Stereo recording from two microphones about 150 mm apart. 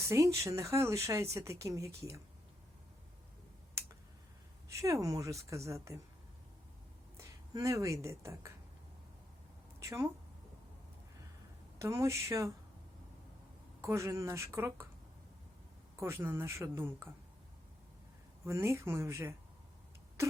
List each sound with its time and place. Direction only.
0.0 s speech: 20° right (ahead or behind)
4.7 s speech: 20° right (ahead or behind)
7.2 s speech: 20° right (ahead or behind)
9.8 s a woman's voice: 20° right (ahead or behind)
11.8 s speech: 20° right (ahead or behind)
13.8 s speech: 20° right (ahead or behind)
16.0 s speech: 15° right (ahead or behind)
18.4 s speech: 20° right (ahead or behind)